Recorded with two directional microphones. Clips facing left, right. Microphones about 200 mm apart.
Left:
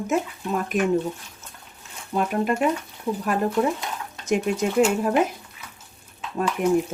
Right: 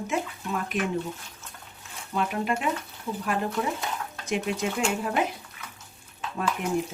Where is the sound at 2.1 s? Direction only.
45° left (ahead or behind).